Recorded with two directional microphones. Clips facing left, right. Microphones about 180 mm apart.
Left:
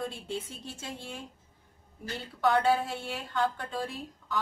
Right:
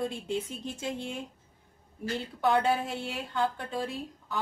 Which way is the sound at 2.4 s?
15° right (ahead or behind).